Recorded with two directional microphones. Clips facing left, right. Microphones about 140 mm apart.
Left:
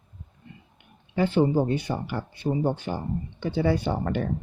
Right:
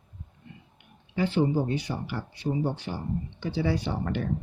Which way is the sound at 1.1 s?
50° left (ahead or behind).